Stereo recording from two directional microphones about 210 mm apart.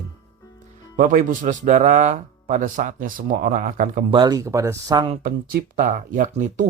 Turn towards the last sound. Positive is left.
turn(degrees=-40)  # may be behind; listen again after turning